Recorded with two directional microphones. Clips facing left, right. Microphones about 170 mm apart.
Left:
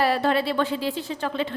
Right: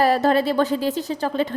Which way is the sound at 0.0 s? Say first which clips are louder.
Right 4 dB; 40° right (ahead or behind).